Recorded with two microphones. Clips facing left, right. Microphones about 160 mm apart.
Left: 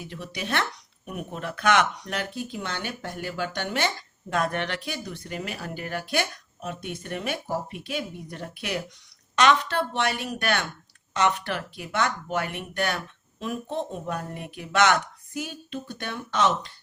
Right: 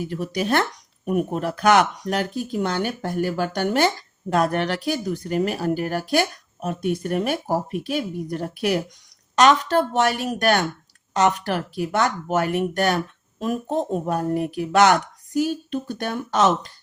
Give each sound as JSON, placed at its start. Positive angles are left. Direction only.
{"t": 0.0, "sound": "speech", "side_deg": -45}